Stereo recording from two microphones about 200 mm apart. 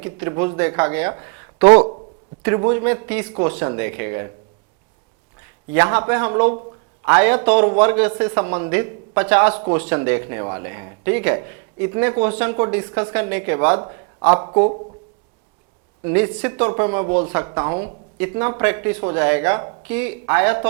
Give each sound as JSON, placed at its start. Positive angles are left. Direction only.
{"t": 0.0, "sound": "speech", "side_deg": -20}
{"t": 1.6, "sound": "speech", "side_deg": -30}
{"t": 3.3, "sound": "speech", "side_deg": -30}
{"t": 3.8, "sound": "speech", "side_deg": -15}
{"t": 5.7, "sound": "a man's voice", "side_deg": -20}
{"t": 7.4, "sound": "speech", "side_deg": -35}
{"t": 9.5, "sound": "speech", "side_deg": -35}
{"t": 9.9, "sound": "speech", "side_deg": -20}
{"t": 16.1, "sound": "speech", "side_deg": -20}